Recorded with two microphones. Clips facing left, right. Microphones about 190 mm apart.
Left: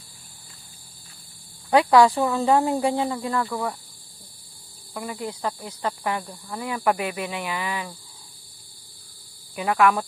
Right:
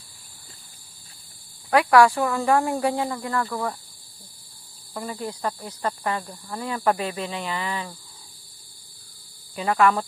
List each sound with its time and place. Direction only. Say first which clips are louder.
1.7 s speech: left 1 dB; 25° left (ahead or behind)
4.9 s speech: even; 15° left (ahead or behind)
9.6 s speech: even; 5° left (ahead or behind)